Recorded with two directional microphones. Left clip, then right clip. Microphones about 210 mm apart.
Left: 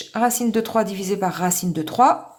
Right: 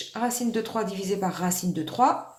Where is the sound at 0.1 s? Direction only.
35° left (ahead or behind).